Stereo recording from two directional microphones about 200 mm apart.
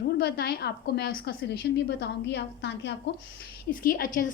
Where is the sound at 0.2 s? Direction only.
50° left (ahead or behind).